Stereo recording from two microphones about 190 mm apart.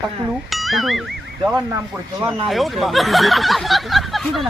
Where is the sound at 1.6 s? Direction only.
15° right (ahead or behind).